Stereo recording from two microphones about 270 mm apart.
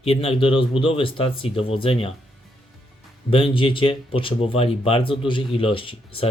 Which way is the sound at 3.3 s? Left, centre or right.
Centre.